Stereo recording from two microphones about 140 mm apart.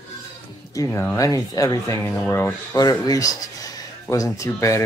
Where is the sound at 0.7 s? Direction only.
15° left (ahead or behind).